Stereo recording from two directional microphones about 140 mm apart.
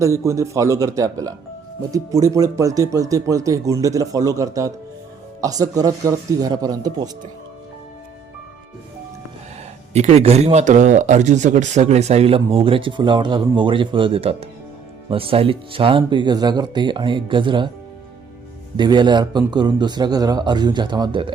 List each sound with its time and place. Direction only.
0.0 s speech: 20° right (ahead or behind)
9.9 s speech: 50° right (ahead or behind); by 17.7 s 35° right (ahead or behind)
18.8 s speech: 30° right (ahead or behind)